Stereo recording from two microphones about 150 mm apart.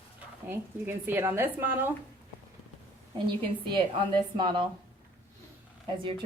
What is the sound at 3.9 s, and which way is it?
Speech, 30° right (ahead or behind).